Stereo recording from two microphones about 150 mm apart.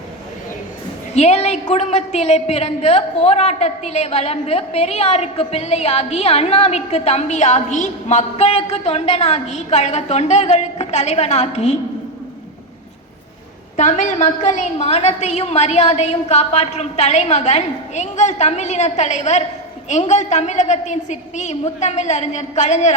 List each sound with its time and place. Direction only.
1.1 s a man's voice: 45° left (ahead or behind)
13.7 s a man's voice: 55° left (ahead or behind)